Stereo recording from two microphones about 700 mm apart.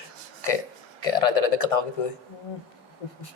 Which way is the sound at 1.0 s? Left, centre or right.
Left.